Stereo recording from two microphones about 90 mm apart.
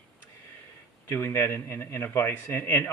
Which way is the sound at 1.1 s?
30° left (ahead or behind).